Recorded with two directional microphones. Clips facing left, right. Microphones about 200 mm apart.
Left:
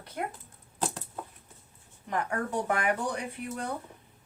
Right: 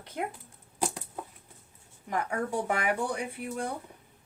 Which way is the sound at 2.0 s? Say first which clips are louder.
Even; 10° right (ahead or behind).